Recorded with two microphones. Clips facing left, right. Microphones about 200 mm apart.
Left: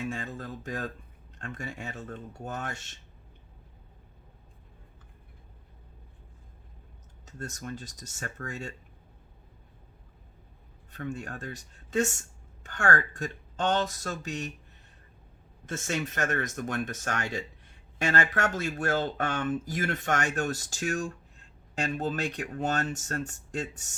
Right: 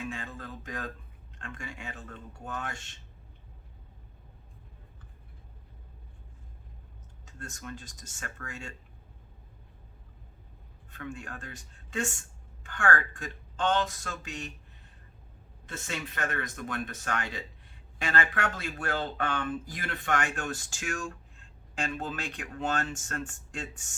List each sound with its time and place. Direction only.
0.1 s a sound: 40° left (ahead or behind)
1.4 s speech: 45° left (ahead or behind)
7.3 s speech: 40° left (ahead or behind)
10.9 s speech: 40° left (ahead or behind)
15.6 s speech: 45° left (ahead or behind)